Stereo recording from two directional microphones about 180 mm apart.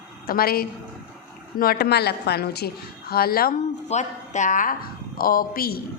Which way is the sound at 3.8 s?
40° left (ahead or behind).